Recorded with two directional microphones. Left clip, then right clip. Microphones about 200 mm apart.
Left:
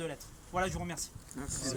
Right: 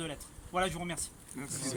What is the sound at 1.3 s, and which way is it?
Speech, 25° right (ahead or behind).